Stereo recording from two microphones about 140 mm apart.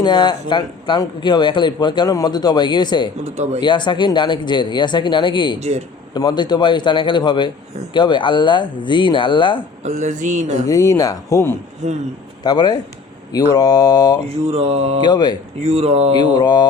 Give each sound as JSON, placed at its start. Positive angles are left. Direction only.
{"t": 0.0, "sound": "speech", "side_deg": 30}
{"t": 3.2, "sound": "mantra", "side_deg": -50}
{"t": 3.6, "sound": "speech", "side_deg": 35}
{"t": 5.5, "sound": "mantra", "side_deg": -50}
{"t": 6.1, "sound": "speech", "side_deg": 30}
{"t": 9.8, "sound": "speech", "side_deg": -60}
{"t": 10.7, "sound": "speech", "side_deg": 25}
{"t": 11.8, "sound": "mantra", "side_deg": -55}
{"t": 12.4, "sound": "speech", "side_deg": 30}
{"t": 14.3, "sound": "mantra", "side_deg": -45}
{"t": 15.0, "sound": "speech", "side_deg": 30}
{"t": 15.6, "sound": "mantra", "side_deg": -45}
{"t": 16.2, "sound": "speech", "side_deg": 30}